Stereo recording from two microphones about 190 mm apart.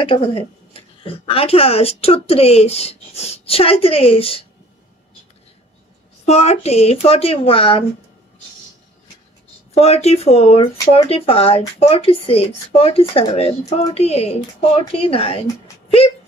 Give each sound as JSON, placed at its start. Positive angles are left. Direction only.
{"t": 0.0, "sound": "speech", "side_deg": 30}
{"t": 6.2, "sound": "speech", "side_deg": 35}
{"t": 9.8, "sound": "speech", "side_deg": 35}